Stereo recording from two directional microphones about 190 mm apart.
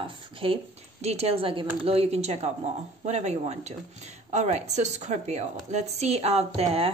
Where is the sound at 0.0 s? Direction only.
30° right (ahead or behind).